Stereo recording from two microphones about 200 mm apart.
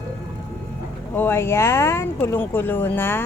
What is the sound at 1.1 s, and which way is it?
A woman's voice, 10° left (ahead or behind).